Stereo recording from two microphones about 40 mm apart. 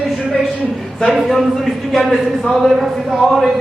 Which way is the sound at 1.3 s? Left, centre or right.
Centre.